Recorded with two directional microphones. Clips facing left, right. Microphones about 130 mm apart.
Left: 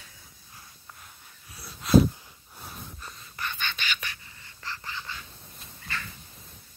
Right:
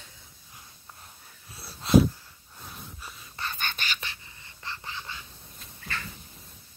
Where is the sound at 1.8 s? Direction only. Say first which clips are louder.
Even; 30° right (ahead or behind).